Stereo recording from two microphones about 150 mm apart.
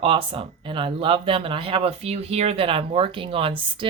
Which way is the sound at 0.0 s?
35° right (ahead or behind).